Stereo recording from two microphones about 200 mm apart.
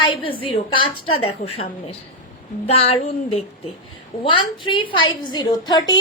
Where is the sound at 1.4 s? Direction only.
40° left (ahead or behind).